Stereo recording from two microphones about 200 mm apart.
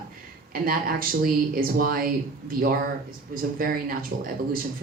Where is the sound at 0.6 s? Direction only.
45° right (ahead or behind).